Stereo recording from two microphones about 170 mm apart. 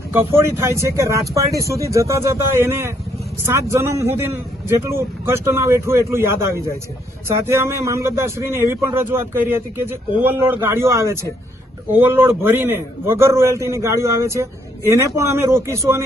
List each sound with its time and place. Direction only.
0.3 s a man's voice: 15° right (ahead or behind)